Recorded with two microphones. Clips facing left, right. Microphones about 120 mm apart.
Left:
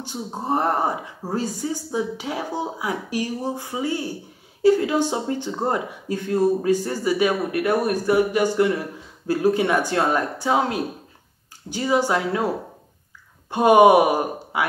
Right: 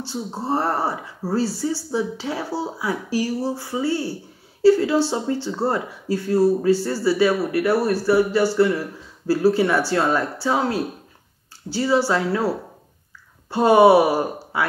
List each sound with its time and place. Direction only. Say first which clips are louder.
0.0 s speech: right 2 dB; 15° left (ahead or behind)